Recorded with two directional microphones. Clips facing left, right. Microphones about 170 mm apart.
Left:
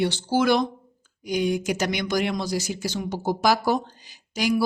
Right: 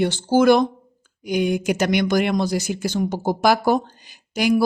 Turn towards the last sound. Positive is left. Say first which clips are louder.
# right 5 dB
turn(degrees=-55)  # may be behind; listen again after turning